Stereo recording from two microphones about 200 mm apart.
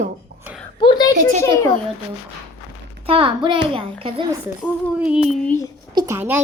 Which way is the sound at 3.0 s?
25° right (ahead or behind).